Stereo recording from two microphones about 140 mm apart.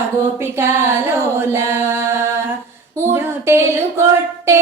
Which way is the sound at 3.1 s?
15° right (ahead or behind).